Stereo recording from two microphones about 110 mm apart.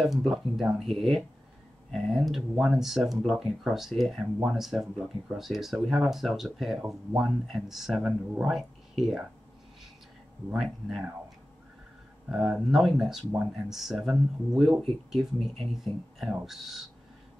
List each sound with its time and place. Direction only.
0.0 s speech: centre (ahead or behind)
10.5 s speech: centre (ahead or behind)
12.3 s speech: centre (ahead or behind)